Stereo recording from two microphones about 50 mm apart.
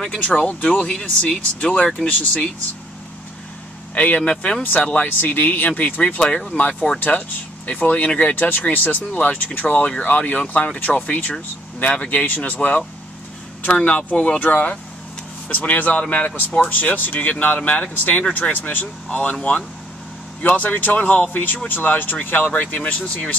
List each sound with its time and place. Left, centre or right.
0.3 s speech: left
3.9 s speech: left
6.2 s speech: centre
6.5 s speech: left
13.7 s speech: centre
14.4 s speech: left
20.4 s speech: left